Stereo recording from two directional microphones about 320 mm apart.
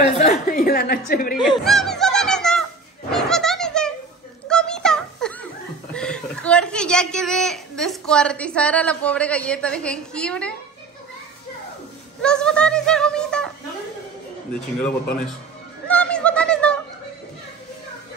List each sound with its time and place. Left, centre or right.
0.2 s speech: left
1.6 s a sound: centre
5.9 s a woman's voice: centre
12.2 s music: centre
14.8 s a man's voice: centre
15.9 s a sound: centre